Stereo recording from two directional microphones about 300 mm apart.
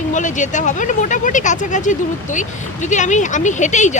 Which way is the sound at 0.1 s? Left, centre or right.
Left.